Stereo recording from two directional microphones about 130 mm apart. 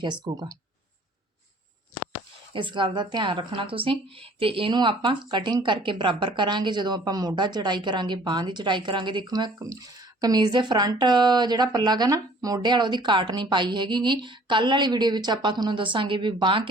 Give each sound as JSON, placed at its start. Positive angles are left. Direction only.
{"t": 0.0, "sound": "speech", "side_deg": -35}
{"t": 2.5, "sound": "speech", "side_deg": -40}